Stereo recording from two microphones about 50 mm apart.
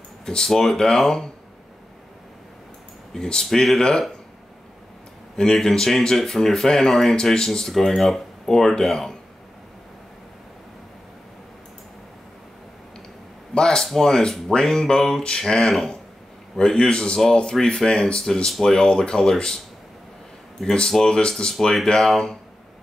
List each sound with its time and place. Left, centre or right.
0.2 s speech: centre
3.2 s speech: centre
5.3 s speech: centre
13.6 s speech: centre
16.5 s speech: centre
20.6 s speech: centre